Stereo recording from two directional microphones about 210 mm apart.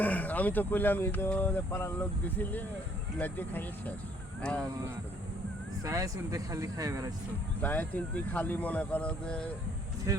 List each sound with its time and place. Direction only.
0.0 s speech: 5° left (ahead or behind)
5.8 s speech: 15° right (ahead or behind)
7.6 s speech: 10° left (ahead or behind)
10.1 s speech: 15° right (ahead or behind)